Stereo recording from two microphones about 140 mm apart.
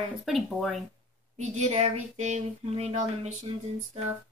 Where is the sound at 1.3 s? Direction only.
50° right (ahead or behind).